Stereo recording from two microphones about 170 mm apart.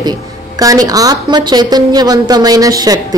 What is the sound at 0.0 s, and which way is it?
A woman's voice, 20° right (ahead or behind).